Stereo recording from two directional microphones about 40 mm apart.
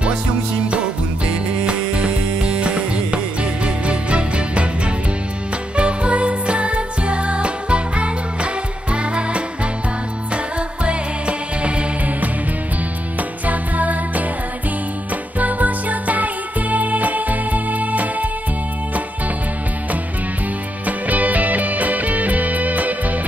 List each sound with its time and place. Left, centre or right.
1.7 s music: right
13.5 s music: right
15.3 s music: right
20.8 s music: right